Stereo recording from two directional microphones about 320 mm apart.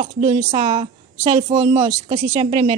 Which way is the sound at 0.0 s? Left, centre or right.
Centre.